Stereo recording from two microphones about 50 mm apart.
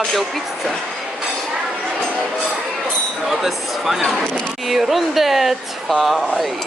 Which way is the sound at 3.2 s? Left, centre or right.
Centre.